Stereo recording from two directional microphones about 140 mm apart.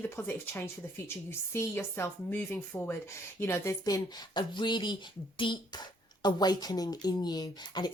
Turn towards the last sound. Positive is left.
turn(degrees=30)  # may be behind; listen again after turning